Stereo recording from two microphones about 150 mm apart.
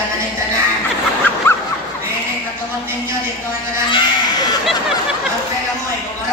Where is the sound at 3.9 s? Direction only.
30° left (ahead or behind).